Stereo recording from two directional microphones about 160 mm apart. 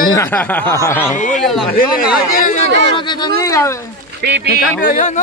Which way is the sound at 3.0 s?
30° left (ahead or behind).